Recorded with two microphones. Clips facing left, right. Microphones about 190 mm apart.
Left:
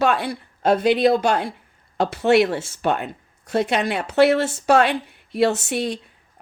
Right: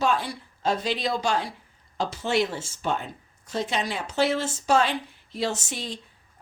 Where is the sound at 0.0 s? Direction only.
65° left (ahead or behind).